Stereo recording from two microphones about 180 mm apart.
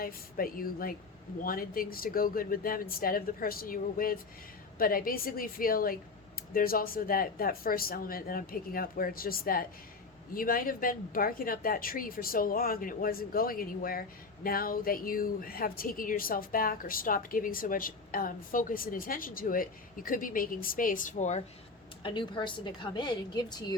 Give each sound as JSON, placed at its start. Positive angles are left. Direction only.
{"t": 0.0, "sound": "speech", "side_deg": 55}
{"t": 22.0, "sound": "a woman's voice", "side_deg": 25}